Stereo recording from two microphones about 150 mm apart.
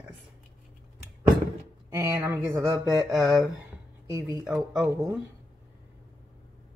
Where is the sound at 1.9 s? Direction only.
15° right (ahead or behind).